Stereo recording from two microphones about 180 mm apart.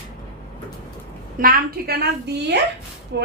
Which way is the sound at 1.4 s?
55° right (ahead or behind).